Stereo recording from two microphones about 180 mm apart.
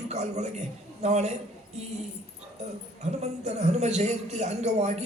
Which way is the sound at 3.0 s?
40° right (ahead or behind).